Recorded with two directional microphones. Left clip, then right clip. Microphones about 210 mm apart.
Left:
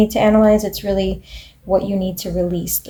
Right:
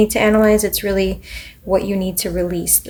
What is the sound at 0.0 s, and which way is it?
Speech, 30° right (ahead or behind).